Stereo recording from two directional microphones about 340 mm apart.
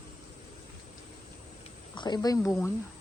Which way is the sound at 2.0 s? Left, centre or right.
Centre.